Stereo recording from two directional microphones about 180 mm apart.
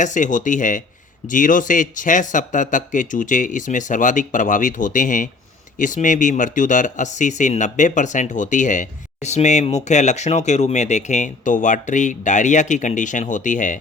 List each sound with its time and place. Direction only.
0.0 s speech: 45° left (ahead or behind)